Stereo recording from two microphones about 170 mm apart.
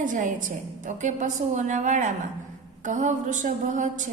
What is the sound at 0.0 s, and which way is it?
A woman's voice, 50° right (ahead or behind).